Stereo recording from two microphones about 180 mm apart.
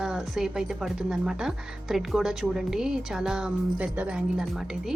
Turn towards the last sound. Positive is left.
turn(degrees=-5)  # may be behind; listen again after turning